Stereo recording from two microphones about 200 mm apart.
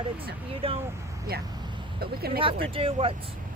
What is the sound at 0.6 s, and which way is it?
Speech, 30° right (ahead or behind).